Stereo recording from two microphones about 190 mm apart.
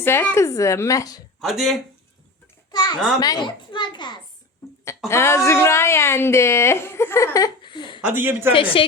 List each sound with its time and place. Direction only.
0.0 s a woman's voice: 10° left (ahead or behind)
1.4 s speech: centre (ahead or behind)
2.7 s a sound: 20° left (ahead or behind)
3.2 s a child's voice: 20° left (ahead or behind)
8.0 s speech: 10° right (ahead or behind)
8.5 s a child's voice: 30° left (ahead or behind)